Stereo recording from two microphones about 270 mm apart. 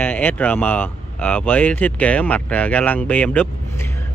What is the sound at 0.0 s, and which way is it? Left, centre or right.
Speech, centre.